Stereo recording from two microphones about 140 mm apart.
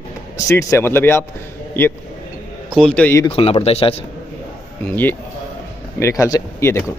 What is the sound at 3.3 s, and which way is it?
Speech, 40° left (ahead or behind).